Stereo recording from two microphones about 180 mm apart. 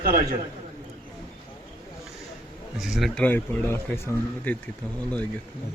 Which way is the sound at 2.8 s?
Centre (ahead or behind).